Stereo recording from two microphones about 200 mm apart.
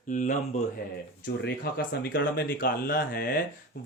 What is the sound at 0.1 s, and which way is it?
Speech, 40° left (ahead or behind).